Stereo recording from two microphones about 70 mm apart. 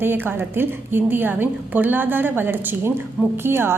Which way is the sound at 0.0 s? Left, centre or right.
Right.